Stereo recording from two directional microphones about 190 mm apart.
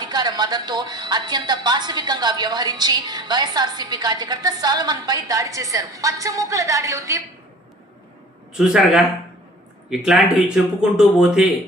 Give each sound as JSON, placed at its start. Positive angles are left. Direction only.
{"t": 0.0, "sound": "a woman's voice", "side_deg": -20}
{"t": 8.5, "sound": "a man's voice", "side_deg": -5}